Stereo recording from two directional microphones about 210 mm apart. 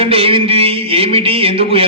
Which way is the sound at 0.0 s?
25° right (ahead or behind).